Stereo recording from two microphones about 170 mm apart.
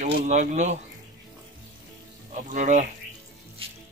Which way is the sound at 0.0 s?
45° right (ahead or behind).